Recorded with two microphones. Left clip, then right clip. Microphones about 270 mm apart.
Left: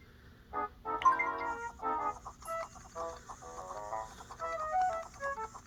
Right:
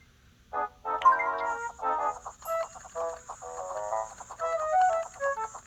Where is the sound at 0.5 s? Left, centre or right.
Right.